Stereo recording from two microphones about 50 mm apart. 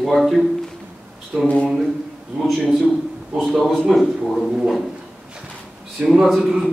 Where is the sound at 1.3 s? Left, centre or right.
Centre.